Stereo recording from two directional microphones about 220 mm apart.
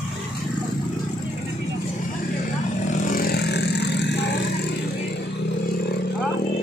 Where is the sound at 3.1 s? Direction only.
40° left (ahead or behind).